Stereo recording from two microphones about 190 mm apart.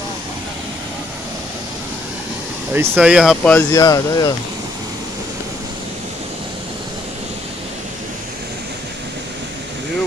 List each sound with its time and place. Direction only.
2.7 s speech: 10° right (ahead or behind)
3.4 s speech: 15° left (ahead or behind)